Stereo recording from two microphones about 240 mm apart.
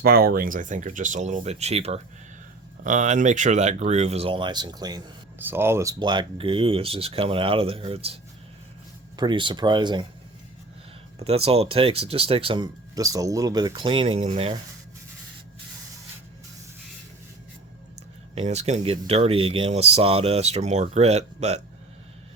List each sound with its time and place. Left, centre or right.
0.0 s speech: right; by 10.1 s centre
11.2 s speech: right
18.3 s speech: right